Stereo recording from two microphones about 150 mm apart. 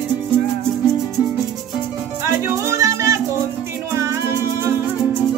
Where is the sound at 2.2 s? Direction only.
20° right (ahead or behind).